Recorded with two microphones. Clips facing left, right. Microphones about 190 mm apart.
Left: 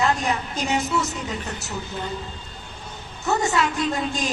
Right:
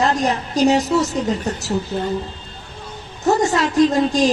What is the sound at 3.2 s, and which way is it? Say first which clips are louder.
A woman's voice: right 5 dB; 40° right (ahead or behind).